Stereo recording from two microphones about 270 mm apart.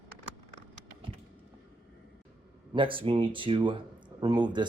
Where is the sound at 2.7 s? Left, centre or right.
Centre.